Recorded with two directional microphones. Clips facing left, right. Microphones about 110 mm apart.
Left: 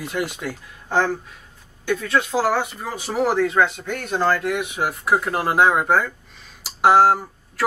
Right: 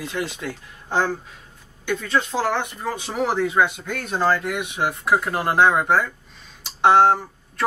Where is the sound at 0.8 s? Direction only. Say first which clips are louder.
Left 2 dB; 15° right (ahead or behind).